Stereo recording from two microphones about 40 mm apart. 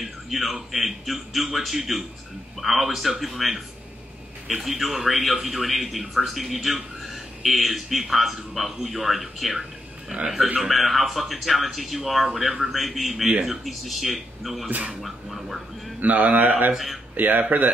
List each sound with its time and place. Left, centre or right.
0.0 s speech: centre
10.1 s speech: right
10.6 s speech: centre
14.7 s speech: right
15.0 s speech: centre
16.0 s a man's voice: right
16.7 s speech: centre
17.1 s a man's voice: right